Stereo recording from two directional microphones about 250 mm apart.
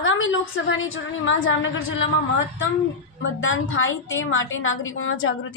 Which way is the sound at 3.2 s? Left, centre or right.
Left.